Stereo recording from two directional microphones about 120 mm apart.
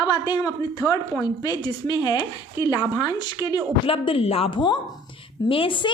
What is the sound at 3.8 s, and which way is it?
A woman's voice, 50° left (ahead or behind).